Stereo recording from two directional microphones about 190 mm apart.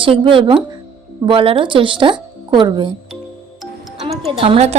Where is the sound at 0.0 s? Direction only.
25° right (ahead or behind).